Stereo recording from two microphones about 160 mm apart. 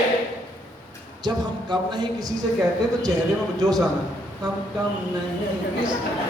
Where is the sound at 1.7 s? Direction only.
25° right (ahead or behind).